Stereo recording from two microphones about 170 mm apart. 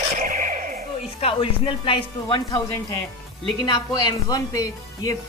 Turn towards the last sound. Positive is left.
turn(degrees=20)  # may be behind; listen again after turning